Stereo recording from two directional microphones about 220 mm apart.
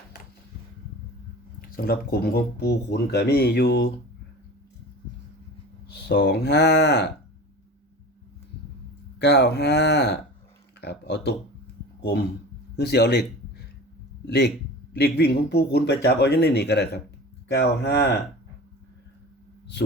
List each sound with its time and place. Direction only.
1.6 s speech: 40° left (ahead or behind)
5.9 s speech: 50° left (ahead or behind)
9.1 s speech: 50° left (ahead or behind)
12.7 s speech: 45° left (ahead or behind)
14.3 s speech: 50° left (ahead or behind)